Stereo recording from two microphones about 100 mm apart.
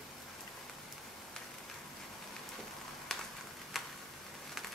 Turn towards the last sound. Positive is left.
turn(degrees=0)  # may be behind; listen again after turning